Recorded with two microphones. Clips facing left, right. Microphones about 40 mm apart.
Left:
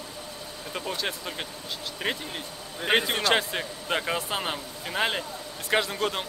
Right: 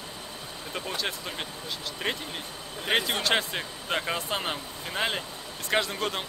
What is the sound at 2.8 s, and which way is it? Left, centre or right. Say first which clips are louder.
Speech: left 3 dB; centre.